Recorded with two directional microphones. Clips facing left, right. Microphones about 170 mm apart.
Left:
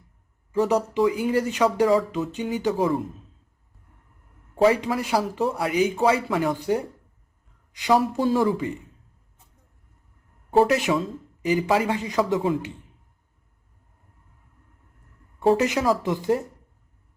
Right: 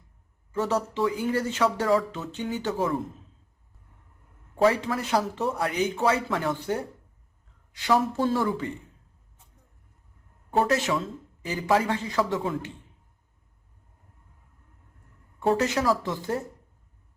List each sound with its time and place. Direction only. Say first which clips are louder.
0.5 s speech: left 5 dB; 15° left (ahead or behind)
4.6 s speech: left 3 dB; 15° left (ahead or behind)
10.7 s speech: left 3 dB; 15° left (ahead or behind)
15.5 s speech: left 3 dB; 15° left (ahead or behind)